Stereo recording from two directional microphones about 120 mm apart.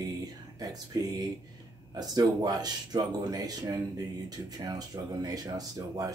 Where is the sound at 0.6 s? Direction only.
30° right (ahead or behind).